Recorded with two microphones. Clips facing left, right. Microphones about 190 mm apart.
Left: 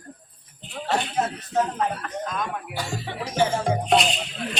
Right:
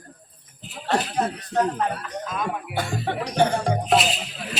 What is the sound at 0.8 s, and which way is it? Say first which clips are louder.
Music: right 1 dB; centre (ahead or behind).